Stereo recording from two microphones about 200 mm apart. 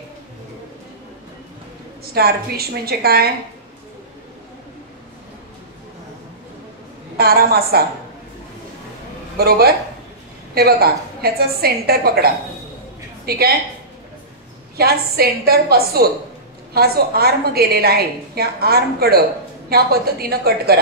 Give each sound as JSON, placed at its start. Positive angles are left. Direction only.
{"t": 2.1, "sound": "a woman's voice", "side_deg": -50}
{"t": 7.2, "sound": "a woman's voice", "side_deg": -50}
{"t": 9.4, "sound": "a woman's voice", "side_deg": -50}
{"t": 14.8, "sound": "a woman's voice", "side_deg": -50}